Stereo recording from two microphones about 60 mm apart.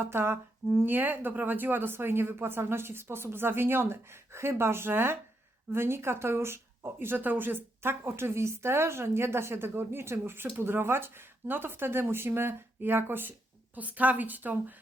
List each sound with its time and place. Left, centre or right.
0.0 s speech: right
13.7 s a woman's voice: right